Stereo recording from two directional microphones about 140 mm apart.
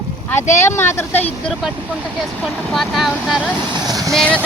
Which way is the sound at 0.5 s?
20° left (ahead or behind).